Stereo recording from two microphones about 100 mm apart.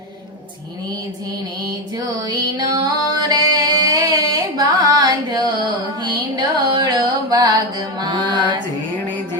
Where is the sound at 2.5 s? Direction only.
45° right (ahead or behind).